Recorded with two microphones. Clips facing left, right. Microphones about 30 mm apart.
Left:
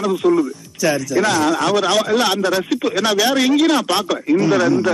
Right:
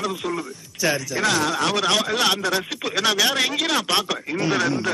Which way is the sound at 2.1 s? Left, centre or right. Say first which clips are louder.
Left 4 dB; centre.